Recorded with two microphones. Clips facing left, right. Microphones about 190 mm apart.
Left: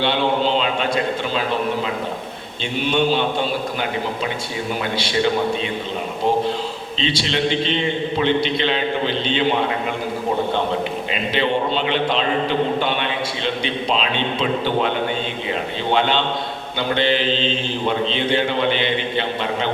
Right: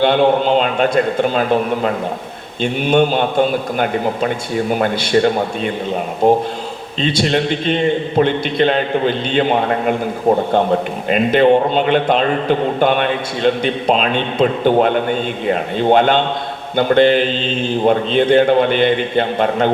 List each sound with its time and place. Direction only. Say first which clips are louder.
0.0 s a man's voice: right 6 dB; 50° right (ahead or behind)
11.1 s a man's voice: right 11 dB; 50° right (ahead or behind)